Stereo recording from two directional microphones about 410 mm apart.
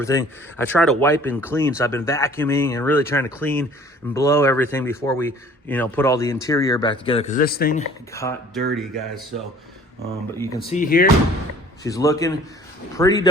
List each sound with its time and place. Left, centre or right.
0.0 s speech: centre
8.1 s speech: centre
10.3 s speech: centre
10.8 s speech: left
11.8 s speech: centre